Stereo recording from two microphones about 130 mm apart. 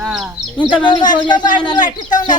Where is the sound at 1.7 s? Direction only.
85° left.